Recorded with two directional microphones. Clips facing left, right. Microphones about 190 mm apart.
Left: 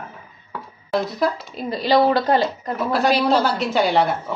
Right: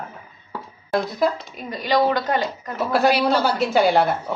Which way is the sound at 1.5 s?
30° left (ahead or behind).